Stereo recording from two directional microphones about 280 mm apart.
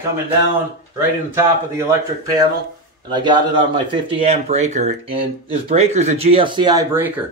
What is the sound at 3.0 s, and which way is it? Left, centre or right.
Speech, centre.